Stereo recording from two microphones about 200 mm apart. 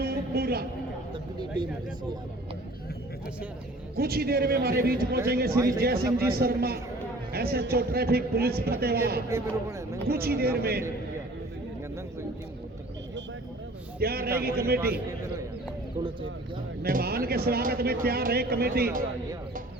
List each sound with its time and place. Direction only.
0.0 s a sound: 50° right (ahead or behind)
1.1 s speech: 20° right (ahead or behind)
3.9 s speech: 50° right (ahead or behind)
5.5 s a man's voice: 15° right (ahead or behind)
5.8 s speech: 50° right (ahead or behind)
9.3 s a man's voice: 15° right (ahead or behind)
10.1 s speech: 50° right (ahead or behind)
14.0 s speech: 50° right (ahead or behind)
16.0 s a man's voice: 15° right (ahead or behind)
16.8 s speech: 50° right (ahead or behind)